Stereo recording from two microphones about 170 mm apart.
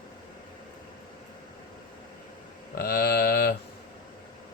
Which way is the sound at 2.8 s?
65° left (ahead or behind).